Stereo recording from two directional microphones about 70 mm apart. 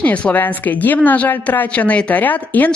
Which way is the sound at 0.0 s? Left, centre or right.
Centre.